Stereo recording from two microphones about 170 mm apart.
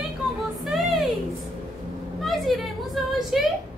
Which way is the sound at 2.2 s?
Centre (ahead or behind).